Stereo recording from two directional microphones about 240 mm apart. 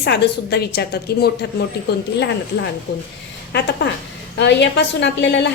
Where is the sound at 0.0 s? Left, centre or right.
Left.